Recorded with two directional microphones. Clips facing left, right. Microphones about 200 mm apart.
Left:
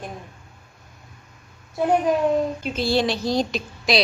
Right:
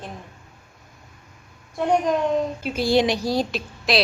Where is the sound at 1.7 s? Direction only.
5° left (ahead or behind).